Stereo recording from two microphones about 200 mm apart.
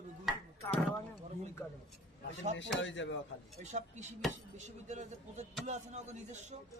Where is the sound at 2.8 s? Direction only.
65° left (ahead or behind).